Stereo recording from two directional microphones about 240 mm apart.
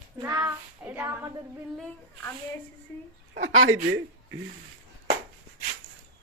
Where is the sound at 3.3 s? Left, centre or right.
Right.